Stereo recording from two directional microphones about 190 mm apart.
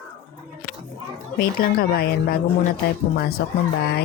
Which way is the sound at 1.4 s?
50° left (ahead or behind).